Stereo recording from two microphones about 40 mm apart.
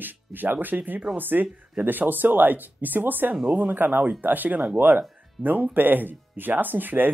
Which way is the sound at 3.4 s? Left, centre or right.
Right.